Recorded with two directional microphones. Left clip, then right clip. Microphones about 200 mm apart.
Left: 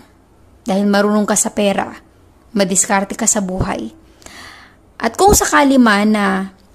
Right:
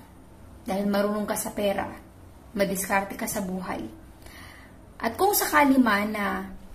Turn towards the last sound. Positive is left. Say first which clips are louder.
# left 11 dB
turn(degrees=45)  # may be behind; listen again after turning